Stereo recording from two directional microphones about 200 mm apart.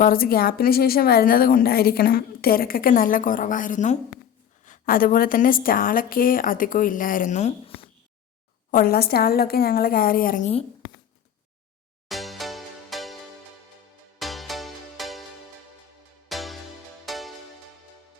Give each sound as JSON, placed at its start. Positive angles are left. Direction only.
{"t": 0.0, "sound": "a woman's voice", "side_deg": 45}
{"t": 8.7, "sound": "a woman's voice", "side_deg": 50}
{"t": 12.0, "sound": "music", "side_deg": 0}
{"t": 14.2, "sound": "music", "side_deg": 0}
{"t": 16.3, "sound": "music", "side_deg": 0}